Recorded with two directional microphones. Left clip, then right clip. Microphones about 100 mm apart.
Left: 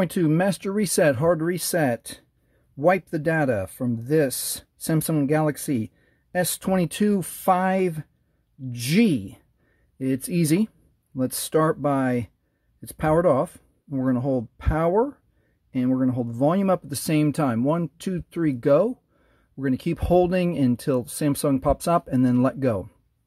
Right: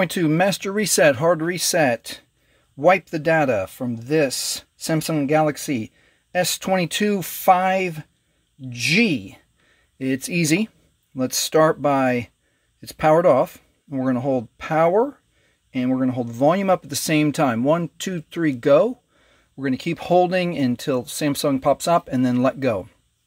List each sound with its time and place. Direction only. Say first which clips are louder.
0.0 s speech: right 3 dB; 15° left (ahead or behind)
7.5 s speech: right 3 dB; 35° left (ahead or behind)
8.7 s speech: right 4 dB; 50° left (ahead or behind)
9.1 s speech: right 1 dB; 35° left (ahead or behind)
9.9 s speech: right 3 dB; 20° left (ahead or behind)
19.5 s speech: right 2 dB; 35° left (ahead or behind)